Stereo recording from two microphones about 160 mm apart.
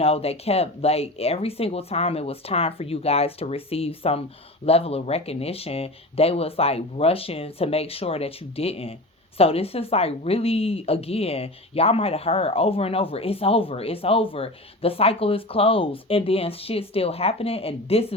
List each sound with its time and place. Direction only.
0.0 s a woman's voice: 40° left (ahead or behind)